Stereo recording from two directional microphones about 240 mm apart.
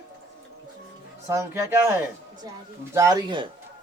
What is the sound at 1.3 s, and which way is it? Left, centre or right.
Speech, centre.